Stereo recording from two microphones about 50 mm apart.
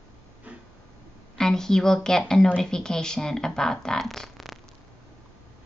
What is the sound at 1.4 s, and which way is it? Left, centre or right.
A woman's voice, centre.